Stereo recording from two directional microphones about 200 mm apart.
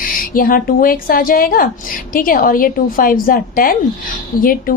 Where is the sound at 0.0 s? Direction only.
45° left (ahead or behind).